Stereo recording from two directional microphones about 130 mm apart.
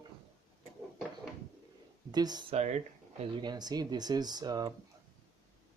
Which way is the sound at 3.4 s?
30° right (ahead or behind).